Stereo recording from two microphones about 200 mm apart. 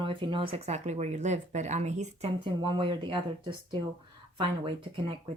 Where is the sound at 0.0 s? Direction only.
25° right (ahead or behind).